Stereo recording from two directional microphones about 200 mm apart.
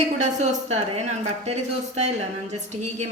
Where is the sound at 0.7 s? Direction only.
35° right (ahead or behind).